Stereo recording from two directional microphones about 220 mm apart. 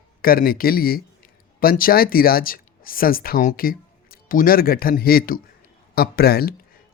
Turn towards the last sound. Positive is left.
turn(degrees=45)  # may be behind; listen again after turning